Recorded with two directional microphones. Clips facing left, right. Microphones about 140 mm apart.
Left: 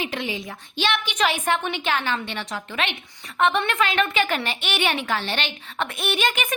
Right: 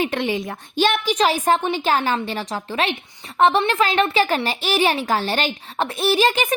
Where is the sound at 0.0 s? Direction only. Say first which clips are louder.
Right 6 dB; 55° right (ahead or behind).